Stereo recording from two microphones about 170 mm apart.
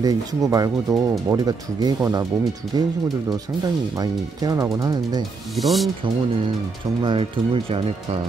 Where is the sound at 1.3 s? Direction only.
20° right (ahead or behind).